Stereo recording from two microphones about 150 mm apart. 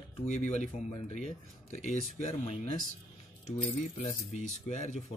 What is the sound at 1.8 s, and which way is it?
Speech, 45° left (ahead or behind).